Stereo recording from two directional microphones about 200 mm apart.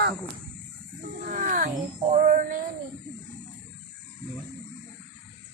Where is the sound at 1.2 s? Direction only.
40° right (ahead or behind).